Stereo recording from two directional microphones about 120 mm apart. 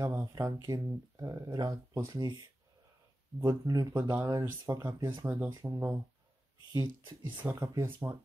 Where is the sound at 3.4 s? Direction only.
30° right (ahead or behind).